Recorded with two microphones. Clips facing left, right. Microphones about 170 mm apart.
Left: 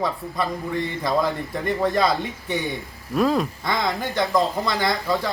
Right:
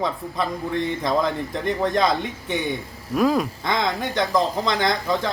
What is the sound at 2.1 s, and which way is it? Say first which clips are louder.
Speech: even; 20° right (ahead or behind).